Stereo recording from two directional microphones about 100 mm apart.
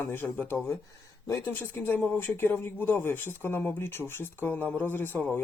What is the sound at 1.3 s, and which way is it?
Speech, 20° left (ahead or behind).